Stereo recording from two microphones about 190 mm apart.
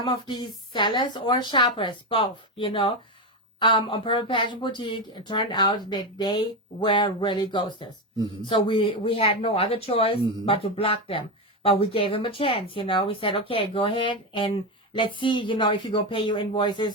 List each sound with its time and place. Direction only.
0.0 s speech: 25° left (ahead or behind)